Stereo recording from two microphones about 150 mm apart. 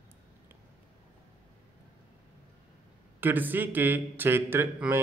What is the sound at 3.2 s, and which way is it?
Speech, 10° right (ahead or behind).